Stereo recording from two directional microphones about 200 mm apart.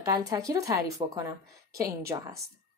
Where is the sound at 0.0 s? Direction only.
15° right (ahead or behind).